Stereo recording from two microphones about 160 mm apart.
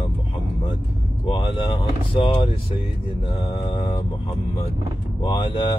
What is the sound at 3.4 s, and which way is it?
Mantra, 30° left (ahead or behind).